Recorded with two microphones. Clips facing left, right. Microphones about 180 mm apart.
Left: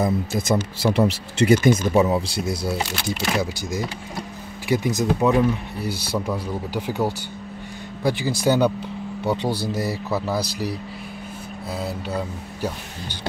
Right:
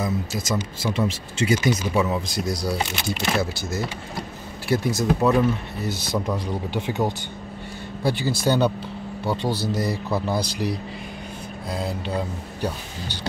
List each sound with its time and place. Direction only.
0.0 s speech: 55° left (ahead or behind)
0.7 s speech: 70° left (ahead or behind); by 2.0 s 50° left (ahead or behind)
2.0 s speech: 30° left (ahead or behind)
3.3 s speech: 15° left (ahead or behind)
8.0 s speech: 15° left (ahead or behind)
9.8 s speech: 5° left (ahead or behind)